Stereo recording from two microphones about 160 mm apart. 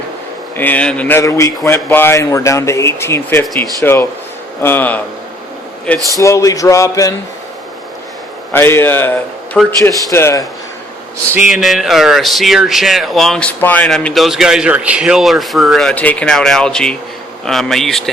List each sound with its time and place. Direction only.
0.5 s speech: 10° left (ahead or behind)
6.1 s speech: 20° left (ahead or behind)
8.5 s speech: 15° left (ahead or behind)
11.3 s a man's voice: 5° right (ahead or behind)